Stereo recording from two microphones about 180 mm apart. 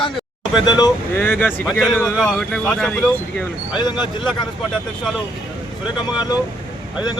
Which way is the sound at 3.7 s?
25° left (ahead or behind).